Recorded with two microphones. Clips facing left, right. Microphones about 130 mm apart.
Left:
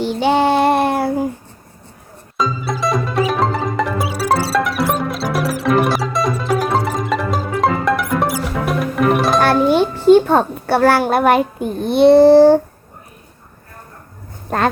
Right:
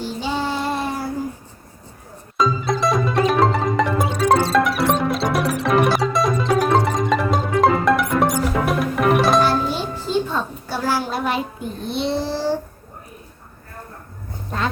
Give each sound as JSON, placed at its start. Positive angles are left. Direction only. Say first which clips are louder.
{"t": 0.0, "sound": "child singing", "louder": "left 9 dB", "side_deg": 70}
{"t": 2.4, "sound": "music", "louder": "right 1 dB", "side_deg": 0}
{"t": 9.4, "sound": "a child's voice", "louder": "left 7 dB", "side_deg": 60}
{"t": 14.5, "sound": "speech", "louder": "left 7 dB", "side_deg": 60}